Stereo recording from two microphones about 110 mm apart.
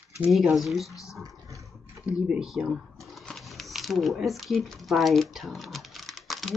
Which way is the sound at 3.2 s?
Centre (ahead or behind).